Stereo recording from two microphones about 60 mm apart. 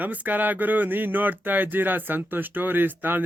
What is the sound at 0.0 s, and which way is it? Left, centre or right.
Speech, right.